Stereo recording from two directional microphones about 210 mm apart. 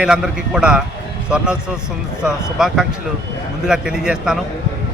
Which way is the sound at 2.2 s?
Centre (ahead or behind).